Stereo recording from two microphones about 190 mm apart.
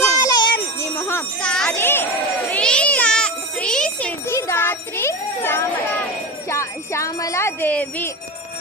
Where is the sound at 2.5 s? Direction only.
5° left (ahead or behind).